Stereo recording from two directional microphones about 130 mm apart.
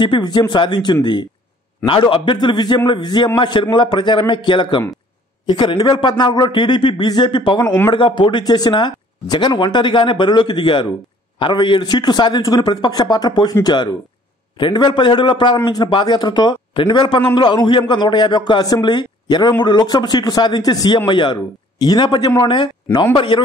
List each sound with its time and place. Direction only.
0.0 s a man's voice: 35° left (ahead or behind)
7.6 s speech: 15° left (ahead or behind)
7.9 s a man's voice: 40° left (ahead or behind)